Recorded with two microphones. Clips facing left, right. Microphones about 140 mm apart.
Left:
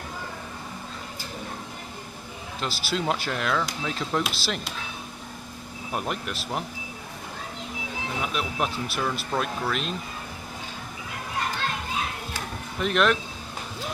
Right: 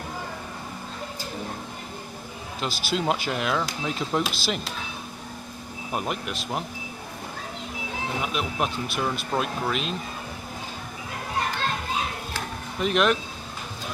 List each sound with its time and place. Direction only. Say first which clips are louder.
2.6 s speech: right 1 dB; 5° right (ahead or behind)
4.2 s speech: right 2 dB; centre (ahead or behind)
5.9 s speech: right 1 dB; 5° right (ahead or behind)
8.2 s speech: even; centre (ahead or behind)
12.8 s speech: right 1 dB; 5° right (ahead or behind)